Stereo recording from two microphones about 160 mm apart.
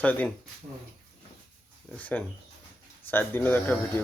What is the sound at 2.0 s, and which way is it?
Speech, 10° left (ahead or behind).